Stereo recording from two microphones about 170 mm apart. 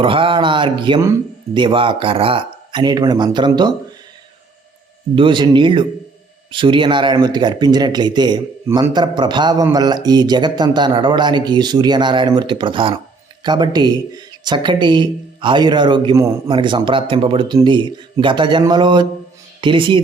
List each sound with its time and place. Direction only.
0.0 s a sound: 30° right (ahead or behind)
1.5 s speech: 30° right (ahead or behind)
5.1 s speech: 30° right (ahead or behind)